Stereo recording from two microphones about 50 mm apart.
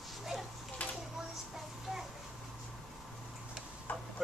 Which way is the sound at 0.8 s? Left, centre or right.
Left.